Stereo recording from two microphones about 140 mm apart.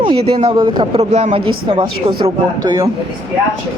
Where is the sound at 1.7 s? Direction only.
35° right (ahead or behind).